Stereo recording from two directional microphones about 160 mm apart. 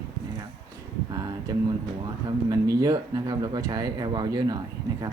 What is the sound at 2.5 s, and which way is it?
Speech, 20° right (ahead or behind).